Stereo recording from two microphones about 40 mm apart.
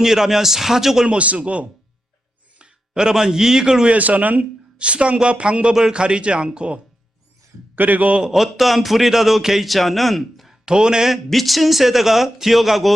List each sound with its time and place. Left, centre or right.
0.0 s a man's voice: centre
1.0 s a man's voice: right
2.6 s speech: right
3.9 s a man's voice: right
4.8 s speech: right
7.8 s a man's voice: right
8.3 s speech: centre
10.5 s speech: centre
11.3 s speech: centre